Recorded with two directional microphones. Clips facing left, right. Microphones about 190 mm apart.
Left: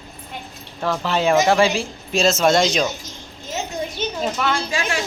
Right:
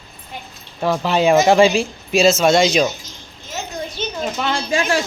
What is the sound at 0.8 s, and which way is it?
Speech, 15° right (ahead or behind).